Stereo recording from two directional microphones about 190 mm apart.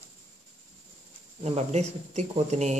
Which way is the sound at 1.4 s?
35° right (ahead or behind).